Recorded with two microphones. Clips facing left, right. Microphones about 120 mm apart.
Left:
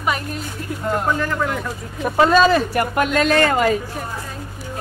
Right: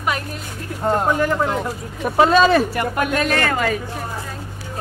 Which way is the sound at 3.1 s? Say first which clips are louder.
Left 6 dB; 25° left (ahead or behind).